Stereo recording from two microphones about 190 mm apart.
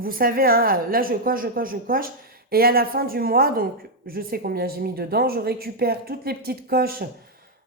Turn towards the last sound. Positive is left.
turn(degrees=-55)  # may be behind; listen again after turning